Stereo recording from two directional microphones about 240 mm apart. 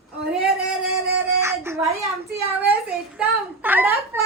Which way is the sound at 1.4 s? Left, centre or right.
Centre.